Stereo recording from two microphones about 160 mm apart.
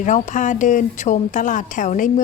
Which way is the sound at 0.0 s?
50° left (ahead or behind).